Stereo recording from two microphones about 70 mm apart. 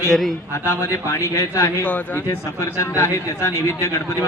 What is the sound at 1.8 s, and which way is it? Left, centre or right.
Speech, left.